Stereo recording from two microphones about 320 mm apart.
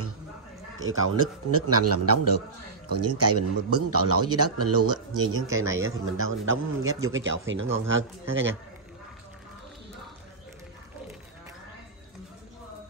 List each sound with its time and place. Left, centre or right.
0.8 s speech: right